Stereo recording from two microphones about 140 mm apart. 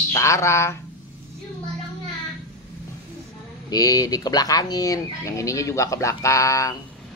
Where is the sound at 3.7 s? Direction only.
25° left (ahead or behind).